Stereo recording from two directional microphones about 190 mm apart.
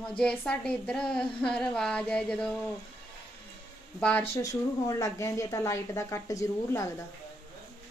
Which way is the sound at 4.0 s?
10° left (ahead or behind).